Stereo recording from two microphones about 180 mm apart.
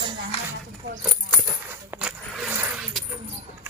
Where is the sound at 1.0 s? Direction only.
5° right (ahead or behind).